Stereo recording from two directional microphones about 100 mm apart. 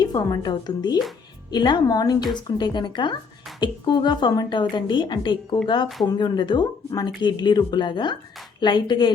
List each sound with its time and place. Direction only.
0.0 s speech: 45° left (ahead or behind)